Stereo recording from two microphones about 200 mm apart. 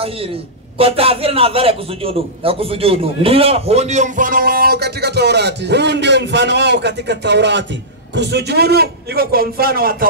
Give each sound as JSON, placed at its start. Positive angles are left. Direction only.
{"t": 0.7, "sound": "a man's voice", "side_deg": -30}